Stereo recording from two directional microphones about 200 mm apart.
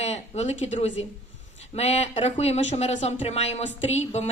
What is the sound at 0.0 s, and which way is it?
A woman's voice, 30° left (ahead or behind).